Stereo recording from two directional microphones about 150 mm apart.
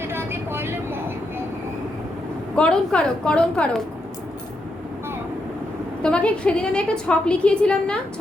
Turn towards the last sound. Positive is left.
turn(degrees=5)  # may be behind; listen again after turning